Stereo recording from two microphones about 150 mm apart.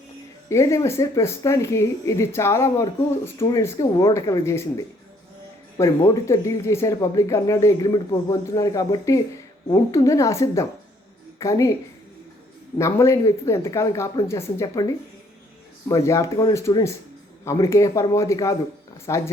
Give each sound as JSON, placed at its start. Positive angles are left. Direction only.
{"t": 0.5, "sound": "speech", "side_deg": 20}
{"t": 12.8, "sound": "speech", "side_deg": 20}
{"t": 15.9, "sound": "speech", "side_deg": 20}